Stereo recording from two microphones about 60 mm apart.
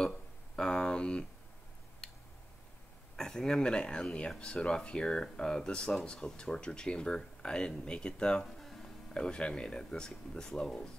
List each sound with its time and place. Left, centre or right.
0.6 s a sound: centre
3.2 s speech: centre
8.5 s music: centre
9.1 s speech: centre